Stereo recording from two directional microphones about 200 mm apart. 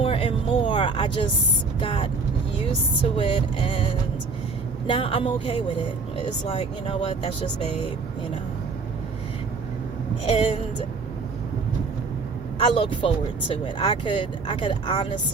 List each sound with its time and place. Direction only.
0.0 s a sound: 25° left (ahead or behind)
1.8 s speech: 25° left (ahead or behind)
10.2 s speech: 30° left (ahead or behind)
12.5 s speech: 30° left (ahead or behind)